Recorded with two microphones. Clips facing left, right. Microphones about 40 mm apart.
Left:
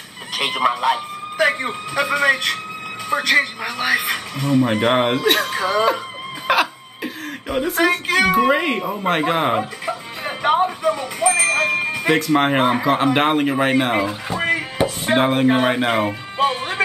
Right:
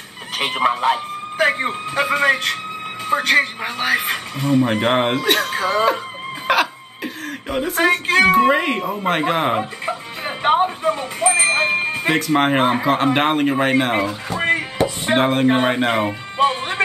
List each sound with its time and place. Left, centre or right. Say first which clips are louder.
0.4 s a woman's voice: right 1 dB; centre
10.4 s speech: right 1 dB; centre
11.1 s wind chime: right 1 dB; centre
12.0 s a woman's voice: left 2 dB; centre